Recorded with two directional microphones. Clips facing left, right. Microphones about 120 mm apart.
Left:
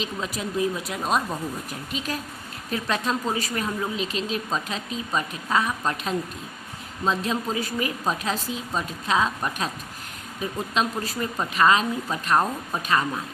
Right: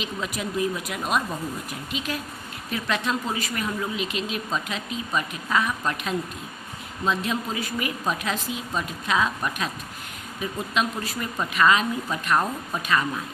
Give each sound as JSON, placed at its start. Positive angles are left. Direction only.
{"t": 0.0, "sound": "speech", "side_deg": 30}
{"t": 10.8, "sound": "speech", "side_deg": 35}